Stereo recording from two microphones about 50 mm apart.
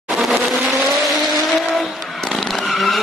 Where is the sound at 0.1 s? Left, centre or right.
Centre.